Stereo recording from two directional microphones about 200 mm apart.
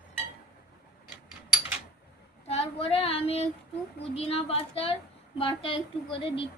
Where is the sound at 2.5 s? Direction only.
30° left (ahead or behind).